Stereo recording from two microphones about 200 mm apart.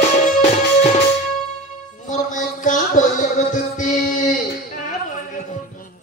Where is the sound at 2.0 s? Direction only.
40° left (ahead or behind).